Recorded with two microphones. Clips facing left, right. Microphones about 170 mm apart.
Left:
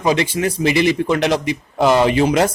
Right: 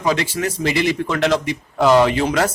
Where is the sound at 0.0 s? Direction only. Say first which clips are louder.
Left 3 dB; 20° left (ahead or behind).